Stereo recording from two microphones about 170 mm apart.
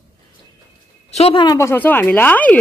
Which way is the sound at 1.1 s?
35° left (ahead or behind).